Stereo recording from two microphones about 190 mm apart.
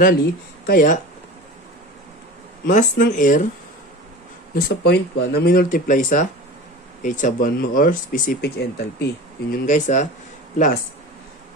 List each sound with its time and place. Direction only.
0.0 s speech: 55° left (ahead or behind)
2.6 s speech: 45° left (ahead or behind)
4.6 s speech: 60° left (ahead or behind)
9.7 s speech: 40° left (ahead or behind)